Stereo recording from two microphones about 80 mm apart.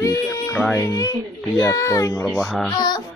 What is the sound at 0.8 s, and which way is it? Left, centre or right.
Speech, left.